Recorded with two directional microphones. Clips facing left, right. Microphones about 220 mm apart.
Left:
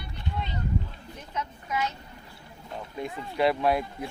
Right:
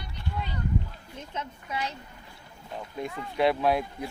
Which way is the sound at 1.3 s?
30° right (ahead or behind).